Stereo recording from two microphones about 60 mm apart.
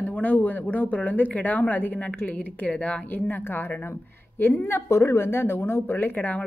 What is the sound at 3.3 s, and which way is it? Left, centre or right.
Speech, left.